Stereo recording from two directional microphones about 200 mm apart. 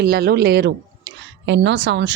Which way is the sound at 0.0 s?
50° right (ahead or behind).